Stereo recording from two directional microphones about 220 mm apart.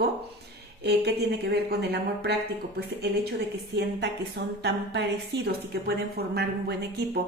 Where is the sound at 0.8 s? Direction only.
45° right (ahead or behind).